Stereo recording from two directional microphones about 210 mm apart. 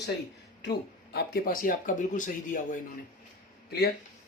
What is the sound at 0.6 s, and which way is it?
Speech, 50° left (ahead or behind).